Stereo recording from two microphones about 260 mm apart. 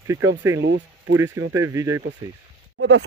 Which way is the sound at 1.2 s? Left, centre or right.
Centre.